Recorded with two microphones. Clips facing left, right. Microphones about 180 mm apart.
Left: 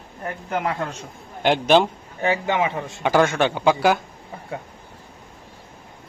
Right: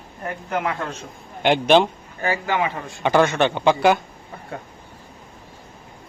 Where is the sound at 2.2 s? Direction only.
20° left (ahead or behind).